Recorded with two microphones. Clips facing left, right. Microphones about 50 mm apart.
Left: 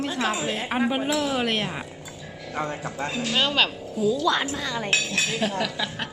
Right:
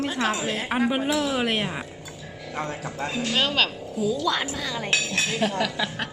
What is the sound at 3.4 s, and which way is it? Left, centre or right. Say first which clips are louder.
Speech: left 1 dB; left.